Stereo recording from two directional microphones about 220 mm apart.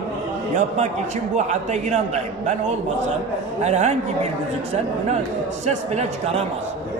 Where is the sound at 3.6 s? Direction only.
30° right (ahead or behind).